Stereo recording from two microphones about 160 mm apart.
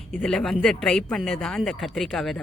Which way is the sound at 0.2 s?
5° left (ahead or behind).